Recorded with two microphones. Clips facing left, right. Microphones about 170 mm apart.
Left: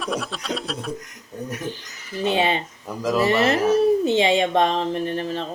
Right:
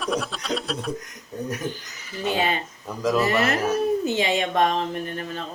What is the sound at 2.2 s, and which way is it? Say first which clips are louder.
Speech: left 3 dB; 25° left (ahead or behind).